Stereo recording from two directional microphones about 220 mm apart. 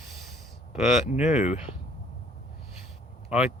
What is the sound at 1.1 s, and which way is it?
Speech, 35° left (ahead or behind).